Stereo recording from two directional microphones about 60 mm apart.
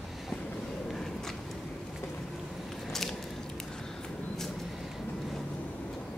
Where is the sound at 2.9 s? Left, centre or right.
Centre.